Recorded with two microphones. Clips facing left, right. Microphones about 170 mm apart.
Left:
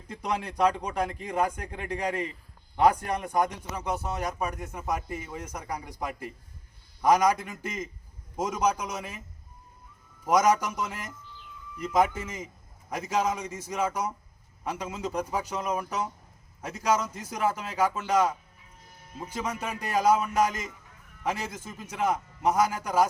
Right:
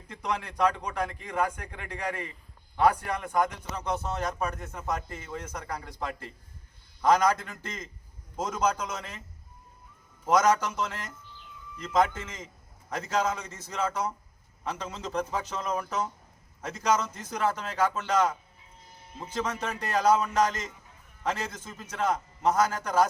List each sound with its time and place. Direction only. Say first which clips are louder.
0.1 s a man's voice: left 1 dB; 15° left (ahead or behind)
10.2 s a man's voice: even; 10° left (ahead or behind)